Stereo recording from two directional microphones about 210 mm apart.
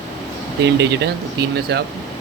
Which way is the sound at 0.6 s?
55° right (ahead or behind).